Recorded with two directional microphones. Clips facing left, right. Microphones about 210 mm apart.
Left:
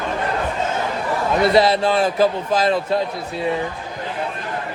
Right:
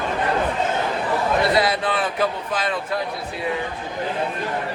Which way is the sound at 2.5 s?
40° left (ahead or behind).